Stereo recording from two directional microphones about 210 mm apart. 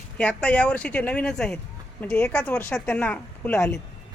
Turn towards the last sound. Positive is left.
turn(degrees=10)  # may be behind; listen again after turning